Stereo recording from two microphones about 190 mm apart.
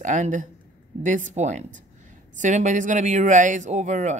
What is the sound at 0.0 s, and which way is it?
A woman's voice, 40° right (ahead or behind).